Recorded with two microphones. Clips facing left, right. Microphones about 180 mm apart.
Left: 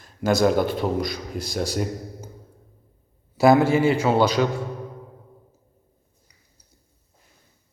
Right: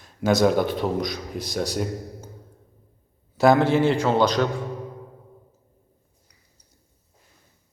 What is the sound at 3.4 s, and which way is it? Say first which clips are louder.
A man's voice: left 1 dB; 5° left (ahead or behind).